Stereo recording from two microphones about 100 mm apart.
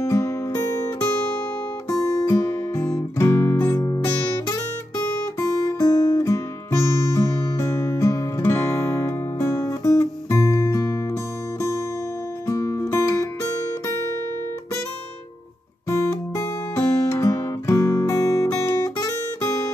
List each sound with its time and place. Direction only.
0.0 s music: 30° left (ahead or behind)
1.9 s guitar: 30° left (ahead or behind)
5.7 s guitar: 35° left (ahead or behind)
7.2 s music: 30° left (ahead or behind)
12.4 s music: 30° left (ahead or behind)
15.9 s music: 30° left (ahead or behind)
16.7 s guitar: 30° left (ahead or behind)